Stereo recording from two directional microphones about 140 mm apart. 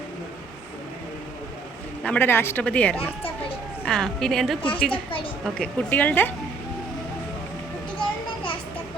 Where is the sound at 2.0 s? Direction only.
15° left (ahead or behind).